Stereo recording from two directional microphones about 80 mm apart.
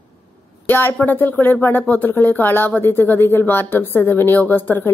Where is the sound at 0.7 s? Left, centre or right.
Left.